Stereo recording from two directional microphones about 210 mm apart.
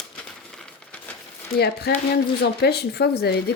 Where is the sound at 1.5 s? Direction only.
50° left (ahead or behind).